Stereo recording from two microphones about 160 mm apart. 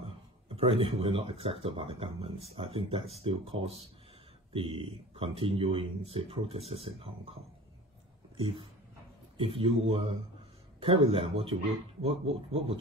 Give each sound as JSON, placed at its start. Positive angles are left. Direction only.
{"t": 0.6, "sound": "speech", "side_deg": -35}
{"t": 8.4, "sound": "speech", "side_deg": -35}